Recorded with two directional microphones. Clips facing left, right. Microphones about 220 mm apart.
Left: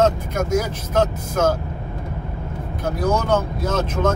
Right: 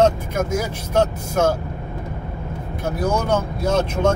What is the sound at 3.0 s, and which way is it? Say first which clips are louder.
Speech: left 1 dB; 10° right (ahead or behind).